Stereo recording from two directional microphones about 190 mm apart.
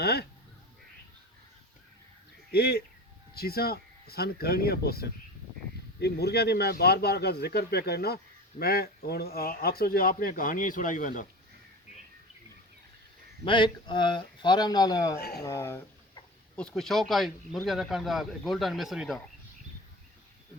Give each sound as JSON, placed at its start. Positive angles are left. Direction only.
{"t": 0.0, "sound": "speech", "side_deg": 60}
{"t": 2.5, "sound": "speech", "side_deg": 55}
{"t": 13.4, "sound": "speech", "side_deg": 25}
{"t": 15.2, "sound": "speech", "side_deg": 55}
{"t": 15.4, "sound": "a sound", "side_deg": 15}
{"t": 16.6, "sound": "speech", "side_deg": 0}